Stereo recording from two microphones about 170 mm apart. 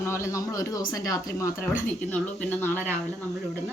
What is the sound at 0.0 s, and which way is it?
Speech, 15° left (ahead or behind).